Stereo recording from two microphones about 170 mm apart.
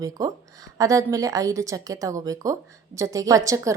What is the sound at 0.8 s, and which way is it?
A woman's voice, 20° right (ahead or behind).